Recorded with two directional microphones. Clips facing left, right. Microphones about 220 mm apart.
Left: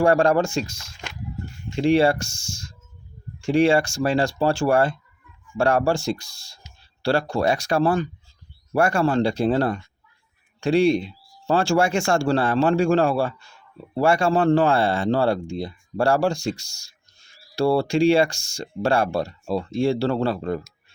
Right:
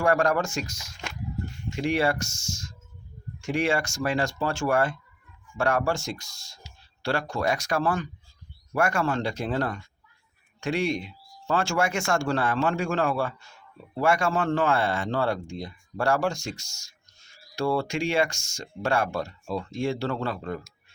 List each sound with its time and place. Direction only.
0.0 s speech: 30° left (ahead or behind)